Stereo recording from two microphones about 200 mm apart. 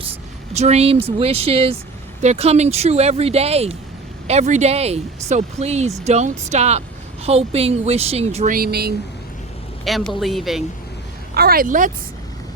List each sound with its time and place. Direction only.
0.5 s a woman's voice: 35° right (ahead or behind)
8.5 s speech: 50° right (ahead or behind)
9.8 s speech: centre (ahead or behind)
11.3 s speech: 50° right (ahead or behind)